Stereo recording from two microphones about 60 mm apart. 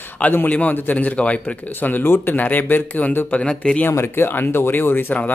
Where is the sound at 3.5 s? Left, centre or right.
Centre.